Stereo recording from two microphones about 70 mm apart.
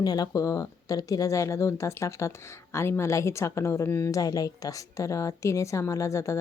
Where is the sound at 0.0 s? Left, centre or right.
Left.